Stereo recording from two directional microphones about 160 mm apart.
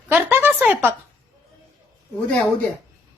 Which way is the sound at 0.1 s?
10° right (ahead or behind).